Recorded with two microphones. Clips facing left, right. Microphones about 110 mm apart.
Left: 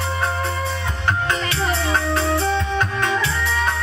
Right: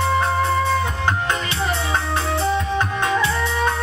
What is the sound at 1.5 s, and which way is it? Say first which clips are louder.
Music: left 1 dB; 25° right (ahead or behind).